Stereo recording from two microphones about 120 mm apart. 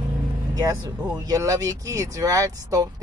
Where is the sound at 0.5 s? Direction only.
30° right (ahead or behind).